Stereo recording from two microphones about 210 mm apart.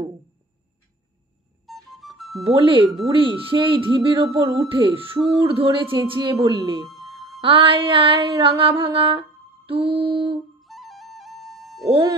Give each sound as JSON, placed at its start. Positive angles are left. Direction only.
{"t": 1.7, "sound": "flute", "side_deg": 0}
{"t": 2.4, "sound": "music", "side_deg": -25}
{"t": 6.3, "sound": "a woman's voice", "side_deg": -15}
{"t": 7.1, "sound": "music", "side_deg": 0}
{"t": 7.4, "sound": "music", "side_deg": -25}
{"t": 10.6, "sound": "music", "side_deg": 0}
{"t": 11.9, "sound": "a woman's voice", "side_deg": -20}